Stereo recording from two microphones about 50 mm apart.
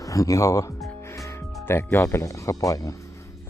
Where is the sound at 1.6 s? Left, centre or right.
Left.